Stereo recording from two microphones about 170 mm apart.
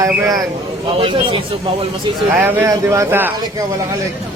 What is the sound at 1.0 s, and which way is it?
Speech, 30° right (ahead or behind).